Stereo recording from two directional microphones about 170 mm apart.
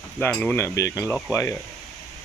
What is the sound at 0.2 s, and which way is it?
Speech, 10° left (ahead or behind).